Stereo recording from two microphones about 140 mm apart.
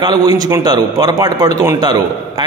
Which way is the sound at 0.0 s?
30° right (ahead or behind).